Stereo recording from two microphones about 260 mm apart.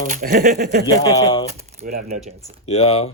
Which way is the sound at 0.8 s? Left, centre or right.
Centre.